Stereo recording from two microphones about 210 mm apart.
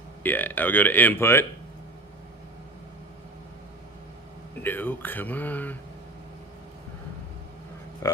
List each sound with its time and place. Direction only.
0.2 s speech: 10° left (ahead or behind)
4.6 s speech: 10° left (ahead or behind)
8.0 s speech: 15° left (ahead or behind)